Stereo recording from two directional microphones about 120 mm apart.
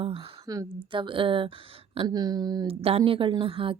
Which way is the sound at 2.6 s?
55° right (ahead or behind).